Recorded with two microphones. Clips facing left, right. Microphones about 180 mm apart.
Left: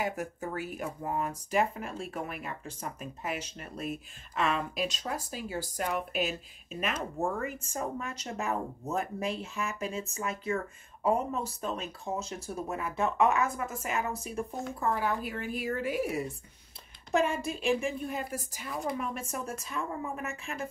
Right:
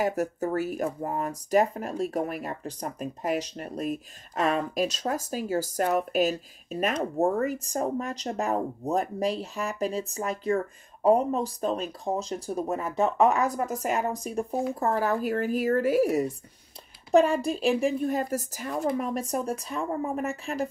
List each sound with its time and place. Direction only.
0.0 s speech: 40° right (ahead or behind)
14.8 s speech: 40° right (ahead or behind)